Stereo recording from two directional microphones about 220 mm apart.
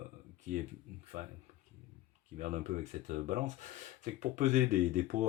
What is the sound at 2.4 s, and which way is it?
Speech, 35° right (ahead or behind).